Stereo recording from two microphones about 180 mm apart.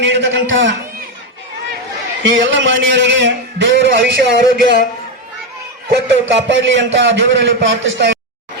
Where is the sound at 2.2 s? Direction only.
90° right.